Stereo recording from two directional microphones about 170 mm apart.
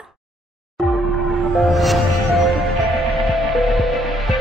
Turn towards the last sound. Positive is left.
turn(degrees=0)  # may be behind; listen again after turning